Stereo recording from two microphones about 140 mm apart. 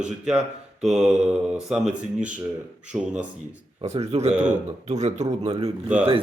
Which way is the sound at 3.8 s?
50° right (ahead or behind).